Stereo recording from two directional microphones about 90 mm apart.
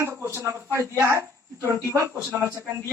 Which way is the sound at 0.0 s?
30° right (ahead or behind).